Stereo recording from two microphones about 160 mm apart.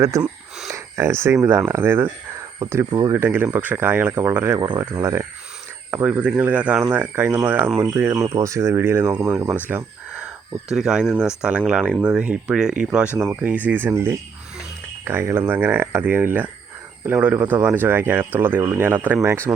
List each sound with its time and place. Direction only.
0.0 s speech: 20° right (ahead or behind)
9.6 s a sound: 10° right (ahead or behind)
10.7 s speech: 5° right (ahead or behind)
13.1 s speech: 15° right (ahead or behind)